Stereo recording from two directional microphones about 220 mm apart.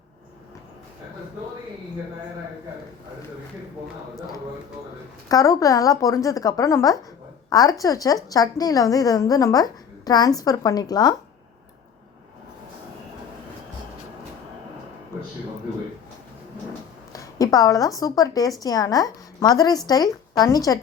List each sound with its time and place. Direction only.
5.3 s a woman's voice: 15° left (ahead or behind)
17.1 s a woman's voice: 15° left (ahead or behind)